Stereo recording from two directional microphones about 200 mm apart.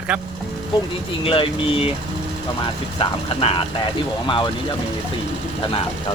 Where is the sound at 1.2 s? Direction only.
25° left (ahead or behind).